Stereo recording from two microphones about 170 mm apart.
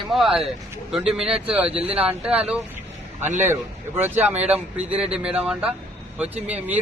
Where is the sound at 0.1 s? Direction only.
Centre (ahead or behind).